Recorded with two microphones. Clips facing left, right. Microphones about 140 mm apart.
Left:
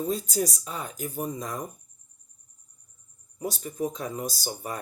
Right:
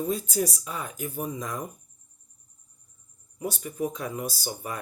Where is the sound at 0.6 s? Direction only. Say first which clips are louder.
Even; 35° left (ahead or behind).